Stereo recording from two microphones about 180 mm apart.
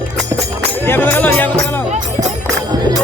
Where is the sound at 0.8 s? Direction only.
10° left (ahead or behind).